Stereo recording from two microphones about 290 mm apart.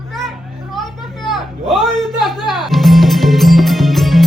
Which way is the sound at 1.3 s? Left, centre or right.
Centre.